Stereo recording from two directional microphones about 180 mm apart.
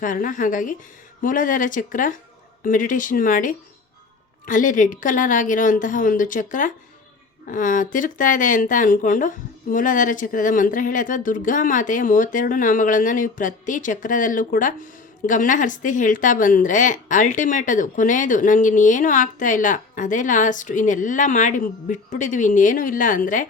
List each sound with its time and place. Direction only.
0.0 s a woman's voice: 45° left (ahead or behind)